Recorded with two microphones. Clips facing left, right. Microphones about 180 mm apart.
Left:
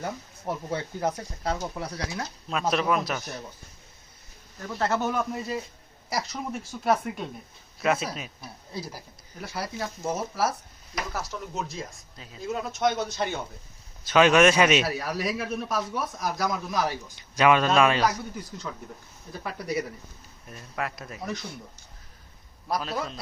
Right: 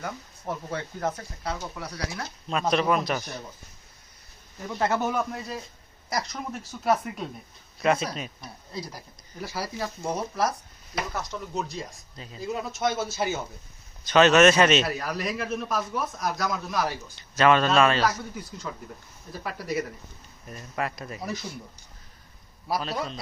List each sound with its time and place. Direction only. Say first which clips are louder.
0.4 s a man's voice: left 2 dB; 15° left (ahead or behind)
1.5 s speech: left 3 dB; 30° left (ahead or behind)
2.5 s a man's voice: right 2 dB; centre (ahead or behind)
5.0 s a man's voice: even; centre (ahead or behind)
14.0 s a man's voice: right 1 dB; 10° left (ahead or behind)
17.2 s a man's voice: right 1 dB; 10° left (ahead or behind)
19.4 s a man's voice: even; centre (ahead or behind)
22.7 s a man's voice: even; centre (ahead or behind)